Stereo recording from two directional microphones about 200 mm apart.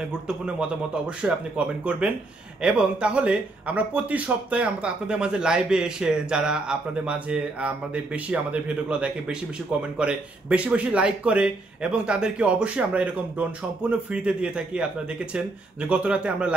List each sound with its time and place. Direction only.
0.0 s speech: 5° right (ahead or behind)
2.6 s speech: 5° right (ahead or behind)
15.9 s speech: 5° right (ahead or behind)